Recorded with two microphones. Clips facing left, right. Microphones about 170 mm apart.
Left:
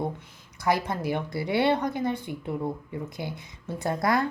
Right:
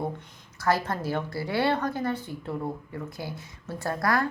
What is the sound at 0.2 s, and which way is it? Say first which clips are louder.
Speech: even; 15° left (ahead or behind).